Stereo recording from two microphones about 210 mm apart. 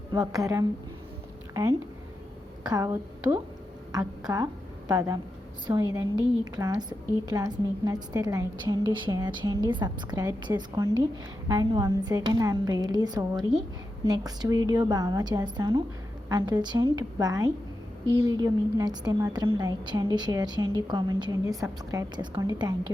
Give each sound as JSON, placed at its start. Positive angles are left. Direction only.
{"t": 0.1, "sound": "a woman's voice", "side_deg": -15}
{"t": 2.6, "sound": "a woman's voice", "side_deg": -15}